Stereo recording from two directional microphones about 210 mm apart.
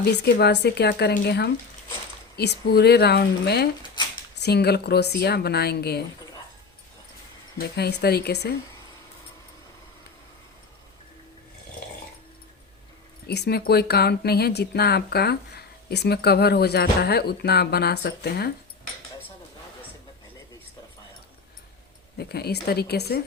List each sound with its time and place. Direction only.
0.0 s speech: 50° left (ahead or behind)
7.6 s speech: 50° left (ahead or behind)
13.2 s speech: 50° left (ahead or behind)
22.2 s speech: 50° left (ahead or behind)